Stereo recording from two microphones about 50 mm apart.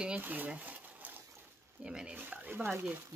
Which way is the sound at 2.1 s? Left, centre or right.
Right.